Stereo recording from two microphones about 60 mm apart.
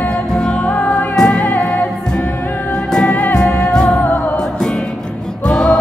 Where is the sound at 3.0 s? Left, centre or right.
Left.